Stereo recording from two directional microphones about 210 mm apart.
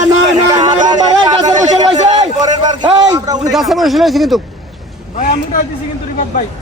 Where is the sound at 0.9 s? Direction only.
20° right (ahead or behind).